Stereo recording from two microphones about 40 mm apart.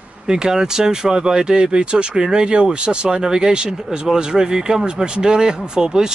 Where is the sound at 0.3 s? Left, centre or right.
Centre.